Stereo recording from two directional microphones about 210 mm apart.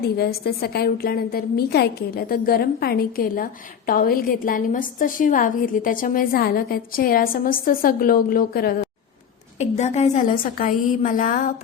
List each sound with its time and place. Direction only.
0.0 s a woman's voice: 50° left (ahead or behind)
9.6 s a woman's voice: 35° left (ahead or behind)